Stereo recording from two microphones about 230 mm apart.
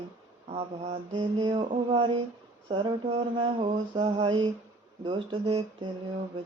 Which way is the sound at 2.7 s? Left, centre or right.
Centre.